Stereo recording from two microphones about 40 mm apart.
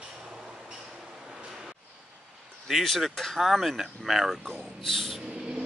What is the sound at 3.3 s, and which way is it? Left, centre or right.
Speech, centre.